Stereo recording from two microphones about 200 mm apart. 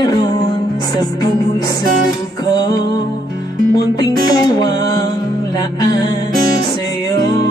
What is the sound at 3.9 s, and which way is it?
Music, 20° left (ahead or behind).